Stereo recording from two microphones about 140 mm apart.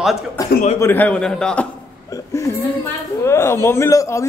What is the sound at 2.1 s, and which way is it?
A man's voice, 20° left (ahead or behind).